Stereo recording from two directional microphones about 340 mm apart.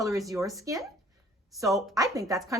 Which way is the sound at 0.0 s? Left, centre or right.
Centre.